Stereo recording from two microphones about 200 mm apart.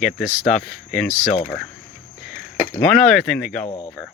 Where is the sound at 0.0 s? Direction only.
Centre (ahead or behind).